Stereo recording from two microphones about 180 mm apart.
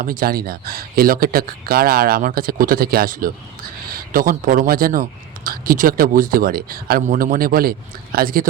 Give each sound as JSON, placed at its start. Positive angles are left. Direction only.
{"t": 0.0, "sound": "a man's voice", "side_deg": -50}